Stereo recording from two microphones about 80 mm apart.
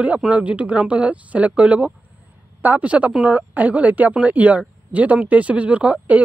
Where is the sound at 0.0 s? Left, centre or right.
Centre.